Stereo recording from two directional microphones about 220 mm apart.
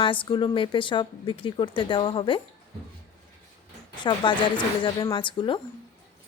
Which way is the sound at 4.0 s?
20° left (ahead or behind).